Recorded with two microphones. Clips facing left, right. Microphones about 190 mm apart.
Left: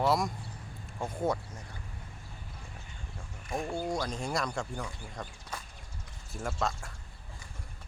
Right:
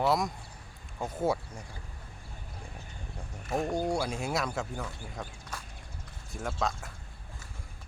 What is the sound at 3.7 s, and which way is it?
Speech, 10° right (ahead or behind).